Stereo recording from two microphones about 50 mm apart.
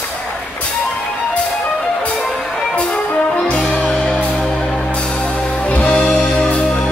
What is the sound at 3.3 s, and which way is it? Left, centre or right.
Music, left.